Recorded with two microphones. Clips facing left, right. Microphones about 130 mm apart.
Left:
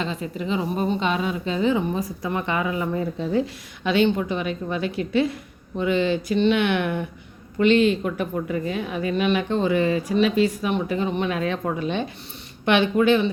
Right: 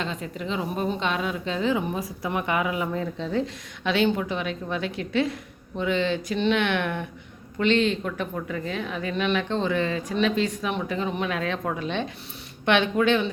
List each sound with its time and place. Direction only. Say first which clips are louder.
0.0 s a woman's voice: left 3 dB; centre (ahead or behind)
2.9 s a woman's voice: left 4 dB; 10° left (ahead or behind)